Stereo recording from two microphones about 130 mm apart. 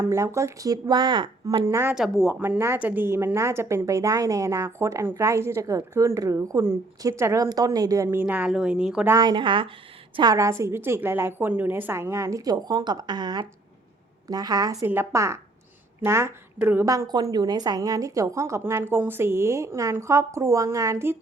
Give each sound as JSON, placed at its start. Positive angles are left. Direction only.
{"t": 0.0, "sound": "speech", "side_deg": -20}
{"t": 1.6, "sound": "speech", "side_deg": -20}
{"t": 2.0, "sound": "speech", "side_deg": -5}
{"t": 2.3, "sound": "speech", "side_deg": -15}
{"t": 9.0, "sound": "a woman's voice", "side_deg": -30}
{"t": 10.3, "sound": "speech", "side_deg": -25}
{"t": 16.8, "sound": "speech", "side_deg": -25}